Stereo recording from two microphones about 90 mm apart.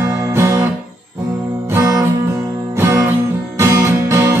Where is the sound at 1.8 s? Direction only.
40° right (ahead or behind).